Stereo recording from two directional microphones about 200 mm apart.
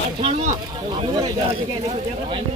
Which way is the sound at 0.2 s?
25° right (ahead or behind).